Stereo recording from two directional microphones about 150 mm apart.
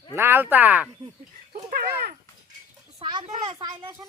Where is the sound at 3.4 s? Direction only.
35° right (ahead or behind).